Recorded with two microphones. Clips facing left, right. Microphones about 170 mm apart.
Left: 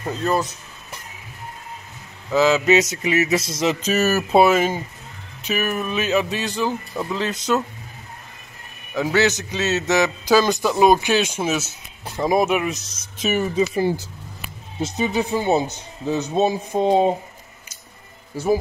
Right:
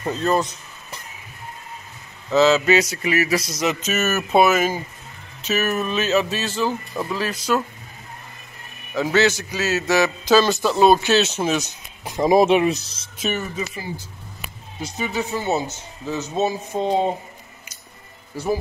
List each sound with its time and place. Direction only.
0.0 s a man's voice: 5° left (ahead or behind)
2.3 s a sound: 15° left (ahead or behind); by 4.7 s 30° left (ahead or behind)
5.4 s a man's voice: 10° left (ahead or behind)
7.1 s a sound: 20° left (ahead or behind)
8.9 s a man's voice: 15° left (ahead or behind)
12.0 s speech: 20° right (ahead or behind)
14.8 s a man's voice: 20° left (ahead or behind)